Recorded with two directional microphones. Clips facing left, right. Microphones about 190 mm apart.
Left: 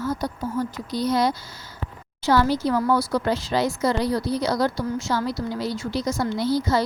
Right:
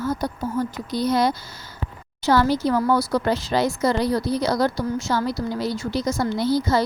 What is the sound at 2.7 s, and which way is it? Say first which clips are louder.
Speech: right 1 dB; 40° right (ahead or behind).